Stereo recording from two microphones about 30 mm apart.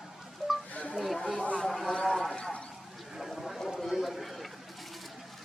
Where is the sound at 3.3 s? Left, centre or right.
Centre.